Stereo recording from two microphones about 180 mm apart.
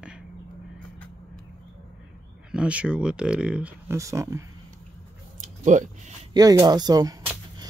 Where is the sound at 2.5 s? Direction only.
5° right (ahead or behind).